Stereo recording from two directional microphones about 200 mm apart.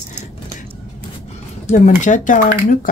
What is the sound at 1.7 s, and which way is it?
Speech, 40° left (ahead or behind).